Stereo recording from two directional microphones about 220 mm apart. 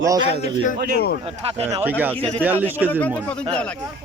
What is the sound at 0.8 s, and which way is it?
Speech, 45° right (ahead or behind).